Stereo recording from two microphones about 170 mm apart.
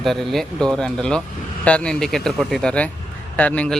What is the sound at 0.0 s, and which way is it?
A man's voice, centre (ahead or behind).